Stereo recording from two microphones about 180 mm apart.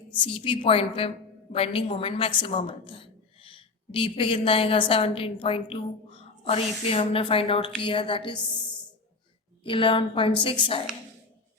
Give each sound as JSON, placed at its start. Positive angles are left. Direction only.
{"t": 0.2, "sound": "a woman's voice", "side_deg": 30}
{"t": 9.6, "sound": "a woman's voice", "side_deg": 30}